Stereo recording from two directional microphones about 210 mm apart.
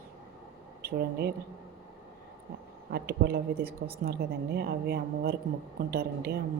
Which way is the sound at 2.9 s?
50° right (ahead or behind).